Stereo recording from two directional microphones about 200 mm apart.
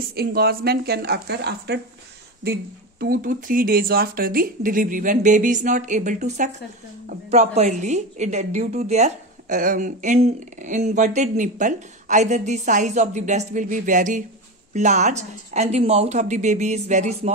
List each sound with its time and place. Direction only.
0.1 s a woman's voice: 50° right (ahead or behind)